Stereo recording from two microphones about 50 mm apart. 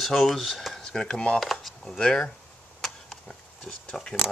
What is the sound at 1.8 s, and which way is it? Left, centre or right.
Speech, centre.